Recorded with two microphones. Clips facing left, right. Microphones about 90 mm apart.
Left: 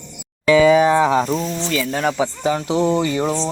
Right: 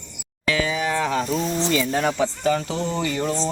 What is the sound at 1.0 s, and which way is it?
Speech, 20° left (ahead or behind).